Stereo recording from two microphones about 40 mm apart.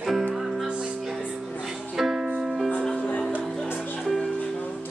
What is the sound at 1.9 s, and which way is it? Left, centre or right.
Music, centre.